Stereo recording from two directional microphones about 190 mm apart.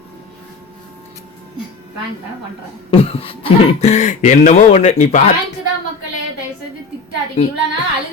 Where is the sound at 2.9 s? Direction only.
30° left (ahead or behind).